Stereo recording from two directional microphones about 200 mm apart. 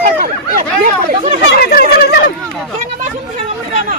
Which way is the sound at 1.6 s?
50° left (ahead or behind).